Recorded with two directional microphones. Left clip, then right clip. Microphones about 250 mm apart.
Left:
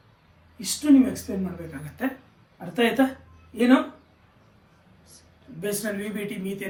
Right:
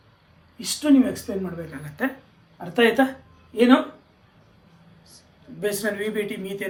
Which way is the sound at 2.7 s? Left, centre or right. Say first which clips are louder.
Right 4 dB; centre.